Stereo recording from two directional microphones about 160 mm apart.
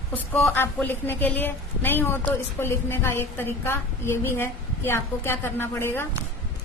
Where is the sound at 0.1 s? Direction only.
15° left (ahead or behind).